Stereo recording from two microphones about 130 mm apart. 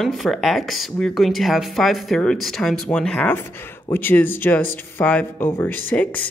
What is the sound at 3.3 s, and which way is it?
Speech, 20° left (ahead or behind).